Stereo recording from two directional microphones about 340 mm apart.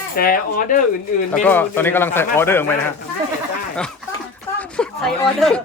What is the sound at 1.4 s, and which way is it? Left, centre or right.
Speech, centre.